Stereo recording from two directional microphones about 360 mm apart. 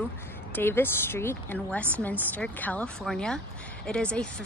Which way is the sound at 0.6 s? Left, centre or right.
Centre.